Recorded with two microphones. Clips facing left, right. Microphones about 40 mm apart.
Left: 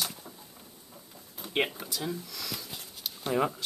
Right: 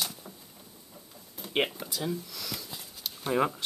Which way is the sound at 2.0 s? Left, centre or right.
Centre.